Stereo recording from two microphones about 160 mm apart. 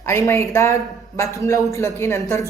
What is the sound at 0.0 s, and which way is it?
A man's voice, 15° left (ahead or behind).